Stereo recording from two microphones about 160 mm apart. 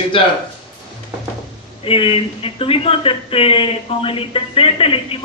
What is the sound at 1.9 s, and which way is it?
Speech, 35° left (ahead or behind).